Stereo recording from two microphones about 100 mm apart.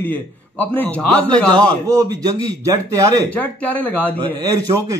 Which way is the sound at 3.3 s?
15° left (ahead or behind).